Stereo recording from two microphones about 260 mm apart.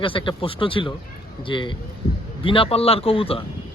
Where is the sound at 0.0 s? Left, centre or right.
Centre.